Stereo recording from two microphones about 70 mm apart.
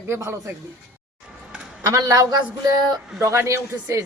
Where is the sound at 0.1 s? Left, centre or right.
Right.